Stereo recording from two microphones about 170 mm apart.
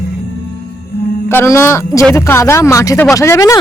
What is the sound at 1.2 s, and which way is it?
Speech, 15° left (ahead or behind).